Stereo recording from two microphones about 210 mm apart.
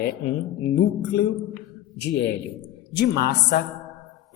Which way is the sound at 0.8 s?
50° left (ahead or behind).